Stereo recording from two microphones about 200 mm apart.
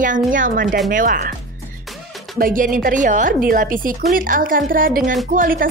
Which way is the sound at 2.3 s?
45° right (ahead or behind).